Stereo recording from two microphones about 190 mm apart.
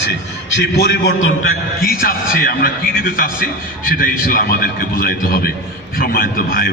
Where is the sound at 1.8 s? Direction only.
50° left (ahead or behind).